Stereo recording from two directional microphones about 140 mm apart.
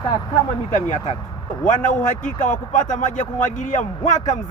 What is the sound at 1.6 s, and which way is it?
Speech, 65° left (ahead or behind).